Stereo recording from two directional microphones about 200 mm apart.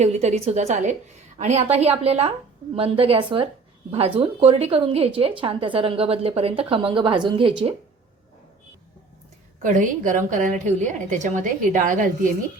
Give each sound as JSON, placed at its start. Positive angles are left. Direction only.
{"t": 0.0, "sound": "a woman's voice", "side_deg": -35}
{"t": 9.6, "sound": "a woman's voice", "side_deg": -40}